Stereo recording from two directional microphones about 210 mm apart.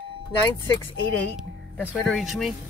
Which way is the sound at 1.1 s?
5° left (ahead or behind).